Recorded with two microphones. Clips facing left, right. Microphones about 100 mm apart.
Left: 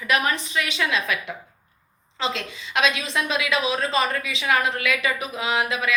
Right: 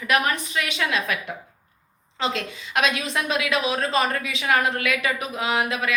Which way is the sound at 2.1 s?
45° right (ahead or behind).